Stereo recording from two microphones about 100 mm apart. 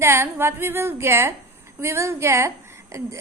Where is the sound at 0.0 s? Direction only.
25° right (ahead or behind).